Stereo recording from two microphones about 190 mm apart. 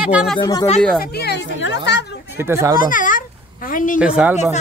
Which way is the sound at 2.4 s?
15° right (ahead or behind).